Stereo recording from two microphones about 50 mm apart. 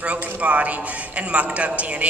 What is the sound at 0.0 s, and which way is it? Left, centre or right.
A man's voice, right.